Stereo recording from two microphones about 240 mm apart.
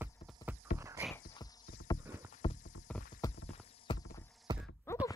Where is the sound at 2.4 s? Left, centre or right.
Left.